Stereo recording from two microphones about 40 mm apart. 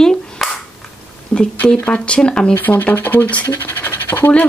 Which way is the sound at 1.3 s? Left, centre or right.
Left.